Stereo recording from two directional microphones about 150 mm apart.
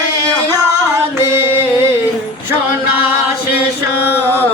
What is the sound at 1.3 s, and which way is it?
Music, 15° right (ahead or behind).